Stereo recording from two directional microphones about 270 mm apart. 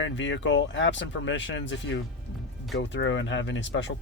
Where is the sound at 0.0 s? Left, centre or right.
Left.